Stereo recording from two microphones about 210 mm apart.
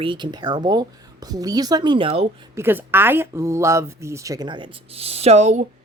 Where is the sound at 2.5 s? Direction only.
10° right (ahead or behind).